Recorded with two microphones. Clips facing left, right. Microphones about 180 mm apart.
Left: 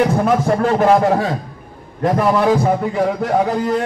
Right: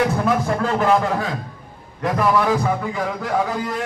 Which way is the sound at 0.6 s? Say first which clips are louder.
Left 5 dB; 40° left (ahead or behind).